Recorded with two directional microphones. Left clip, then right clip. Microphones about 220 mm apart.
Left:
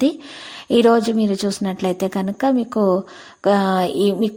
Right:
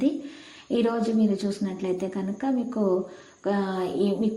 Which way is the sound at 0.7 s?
50° left (ahead or behind).